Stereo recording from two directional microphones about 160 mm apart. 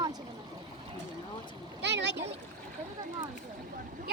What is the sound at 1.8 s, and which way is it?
Speech, 90° right.